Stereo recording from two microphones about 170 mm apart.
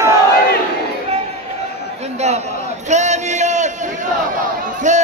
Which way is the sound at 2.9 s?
45° right (ahead or behind).